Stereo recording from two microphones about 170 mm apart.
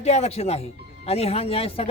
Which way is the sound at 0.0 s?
40° left (ahead or behind).